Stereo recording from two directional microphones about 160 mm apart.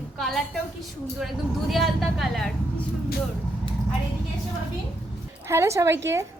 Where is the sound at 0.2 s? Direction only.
Centre (ahead or behind).